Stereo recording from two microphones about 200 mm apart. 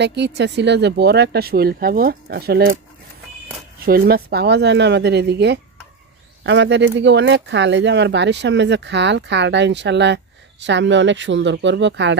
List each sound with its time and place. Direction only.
0.0 s speech: 60° right (ahead or behind)
3.8 s speech: 50° right (ahead or behind)